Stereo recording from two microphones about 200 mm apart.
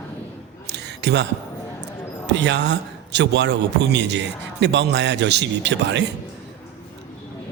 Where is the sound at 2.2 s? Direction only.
65° right (ahead or behind).